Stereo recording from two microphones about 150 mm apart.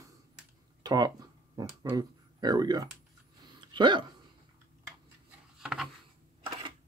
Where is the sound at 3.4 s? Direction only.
30° right (ahead or behind).